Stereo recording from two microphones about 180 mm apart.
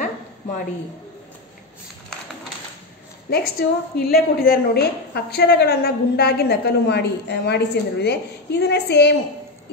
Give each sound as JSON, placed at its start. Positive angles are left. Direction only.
{"t": 3.3, "sound": "a woman's voice", "side_deg": 60}